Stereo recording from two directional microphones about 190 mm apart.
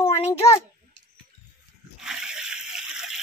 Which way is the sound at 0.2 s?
30° left (ahead or behind).